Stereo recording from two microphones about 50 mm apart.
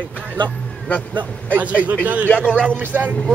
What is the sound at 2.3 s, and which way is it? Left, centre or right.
Speech, left.